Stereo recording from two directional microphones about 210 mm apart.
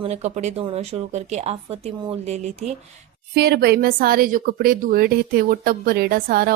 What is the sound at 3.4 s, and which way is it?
A woman's voice, 50° right (ahead or behind).